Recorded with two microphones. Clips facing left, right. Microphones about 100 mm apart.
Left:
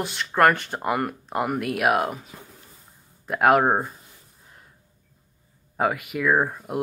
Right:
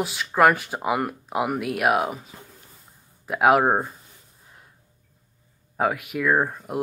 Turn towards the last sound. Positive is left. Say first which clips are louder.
# even
turn(degrees=0)  # may be behind; listen again after turning